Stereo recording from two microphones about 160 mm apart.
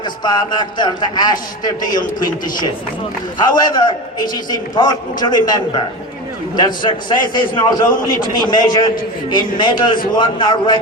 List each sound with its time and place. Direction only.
0.0 s a man's voice: 25° left (ahead or behind)